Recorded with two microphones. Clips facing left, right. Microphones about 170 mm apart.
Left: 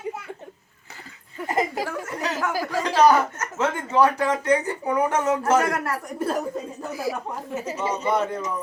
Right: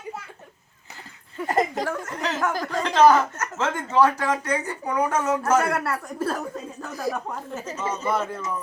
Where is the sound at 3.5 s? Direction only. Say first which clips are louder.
Even; 15° left (ahead or behind).